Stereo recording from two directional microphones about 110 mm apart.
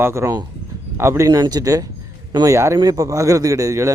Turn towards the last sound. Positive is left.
turn(degrees=-30)  # may be behind; listen again after turning